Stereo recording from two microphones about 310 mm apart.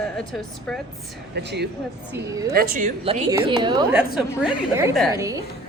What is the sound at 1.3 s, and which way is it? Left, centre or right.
A woman's voice, right.